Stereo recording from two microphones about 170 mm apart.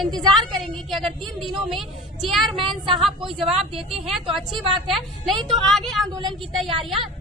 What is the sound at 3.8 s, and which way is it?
Speech, 35° right (ahead or behind).